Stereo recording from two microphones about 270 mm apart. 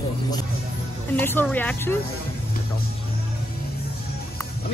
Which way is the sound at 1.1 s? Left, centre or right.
Centre.